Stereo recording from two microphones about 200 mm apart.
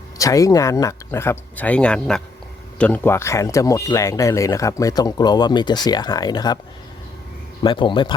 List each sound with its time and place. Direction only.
0.2 s speech: 15° left (ahead or behind)
7.6 s speech: 25° left (ahead or behind)